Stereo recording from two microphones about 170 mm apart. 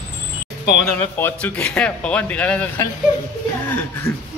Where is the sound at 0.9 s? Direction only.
10° left (ahead or behind).